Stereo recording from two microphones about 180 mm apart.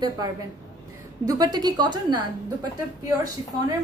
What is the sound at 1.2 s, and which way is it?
Speech, 20° right (ahead or behind).